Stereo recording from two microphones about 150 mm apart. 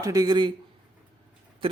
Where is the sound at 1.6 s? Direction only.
35° right (ahead or behind).